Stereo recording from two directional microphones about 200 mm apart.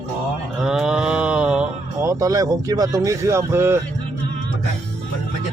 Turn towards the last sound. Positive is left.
turn(degrees=-10)  # may be behind; listen again after turning